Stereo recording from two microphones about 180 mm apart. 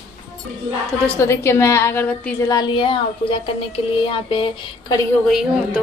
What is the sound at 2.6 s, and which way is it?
Child singing, 30° left (ahead or behind).